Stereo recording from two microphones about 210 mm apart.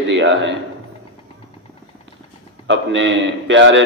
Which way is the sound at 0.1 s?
60° right (ahead or behind).